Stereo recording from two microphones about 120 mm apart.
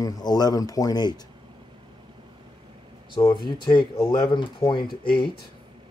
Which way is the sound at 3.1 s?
40° left (ahead or behind).